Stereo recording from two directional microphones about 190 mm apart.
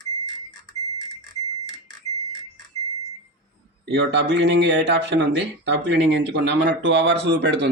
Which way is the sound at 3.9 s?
65° right (ahead or behind).